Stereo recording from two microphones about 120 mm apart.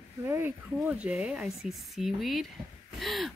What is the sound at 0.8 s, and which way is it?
Speech, 5° right (ahead or behind).